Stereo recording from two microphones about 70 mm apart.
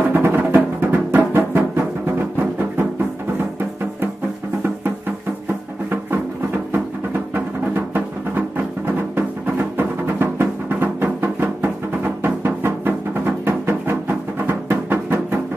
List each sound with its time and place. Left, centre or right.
0.1 s music: right
7.3 s music: right